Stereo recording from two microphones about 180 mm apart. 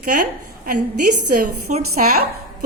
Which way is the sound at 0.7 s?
50° right (ahead or behind).